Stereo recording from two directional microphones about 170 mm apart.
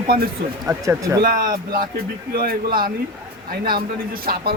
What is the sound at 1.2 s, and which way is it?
Speech, 55° right (ahead or behind).